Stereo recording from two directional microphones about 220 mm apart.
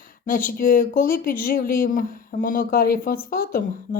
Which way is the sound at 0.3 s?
40° left (ahead or behind).